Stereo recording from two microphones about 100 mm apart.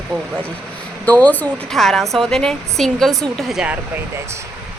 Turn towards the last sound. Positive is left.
turn(degrees=0)  # may be behind; listen again after turning